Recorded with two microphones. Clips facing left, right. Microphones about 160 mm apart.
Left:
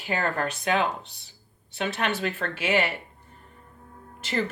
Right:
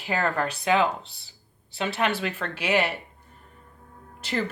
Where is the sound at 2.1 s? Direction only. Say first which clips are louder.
Even; 40° left (ahead or behind).